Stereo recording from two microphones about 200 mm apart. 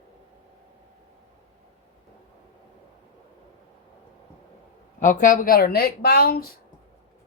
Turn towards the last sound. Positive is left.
turn(degrees=50)  # may be behind; listen again after turning